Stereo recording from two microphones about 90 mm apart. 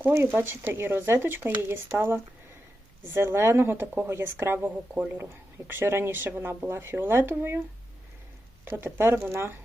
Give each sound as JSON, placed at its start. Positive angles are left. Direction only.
{"t": 0.1, "sound": "speech", "side_deg": -25}
{"t": 8.6, "sound": "speech", "side_deg": -25}